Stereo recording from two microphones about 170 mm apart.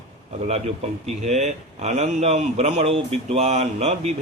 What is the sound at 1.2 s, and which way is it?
Speech, 40° right (ahead or behind).